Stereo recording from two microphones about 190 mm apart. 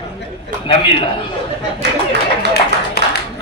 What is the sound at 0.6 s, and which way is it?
Speech, 25° left (ahead or behind).